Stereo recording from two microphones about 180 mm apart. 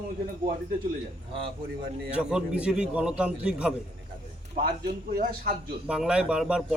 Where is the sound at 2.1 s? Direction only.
5° right (ahead or behind).